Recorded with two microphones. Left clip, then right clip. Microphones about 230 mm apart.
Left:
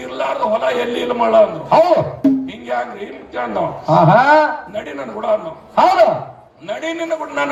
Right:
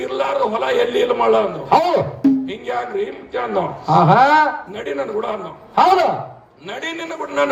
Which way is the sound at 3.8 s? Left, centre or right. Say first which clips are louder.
Left 1 dB; right.